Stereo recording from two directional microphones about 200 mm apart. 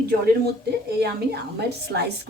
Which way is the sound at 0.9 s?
55° right (ahead or behind).